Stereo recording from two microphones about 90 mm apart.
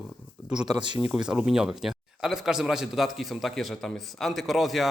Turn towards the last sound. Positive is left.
turn(degrees=0)  # may be behind; listen again after turning